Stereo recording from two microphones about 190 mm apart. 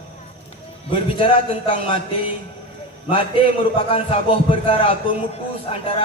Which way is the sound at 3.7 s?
30° left (ahead or behind).